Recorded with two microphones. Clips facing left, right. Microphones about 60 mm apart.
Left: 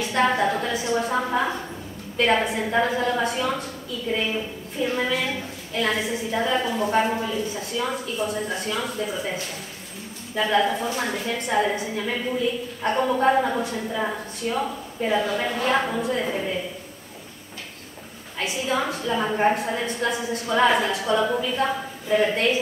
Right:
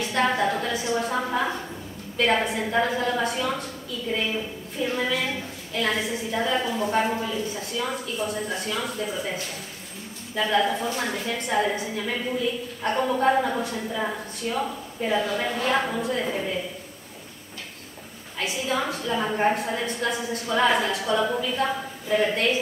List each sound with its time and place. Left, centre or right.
0.0 s a sound: left
0.7 s a woman's voice: centre
8.6 s a woman's voice: left
9.0 s a woman's voice: centre
18.4 s a woman's voice: left